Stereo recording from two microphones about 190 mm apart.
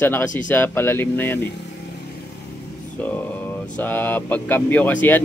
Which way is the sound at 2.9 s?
10° left (ahead or behind).